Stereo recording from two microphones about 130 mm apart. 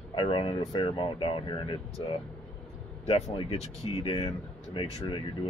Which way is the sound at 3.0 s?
50° left (ahead or behind).